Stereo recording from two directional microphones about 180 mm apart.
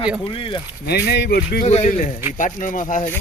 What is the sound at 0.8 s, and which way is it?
Speech, 65° left (ahead or behind).